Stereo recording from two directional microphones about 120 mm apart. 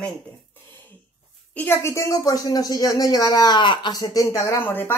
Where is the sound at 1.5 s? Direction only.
15° left (ahead or behind).